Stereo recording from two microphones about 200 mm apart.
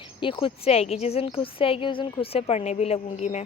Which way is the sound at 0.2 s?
25° left (ahead or behind).